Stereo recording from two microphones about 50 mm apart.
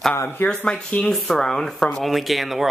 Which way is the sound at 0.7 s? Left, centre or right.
Left.